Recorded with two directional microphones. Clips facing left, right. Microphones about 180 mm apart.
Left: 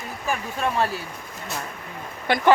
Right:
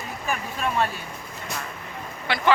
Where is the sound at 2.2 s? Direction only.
45° left (ahead or behind).